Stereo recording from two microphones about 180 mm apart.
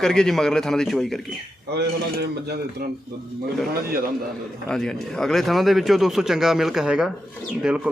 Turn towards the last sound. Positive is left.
turn(degrees=-5)  # may be behind; listen again after turning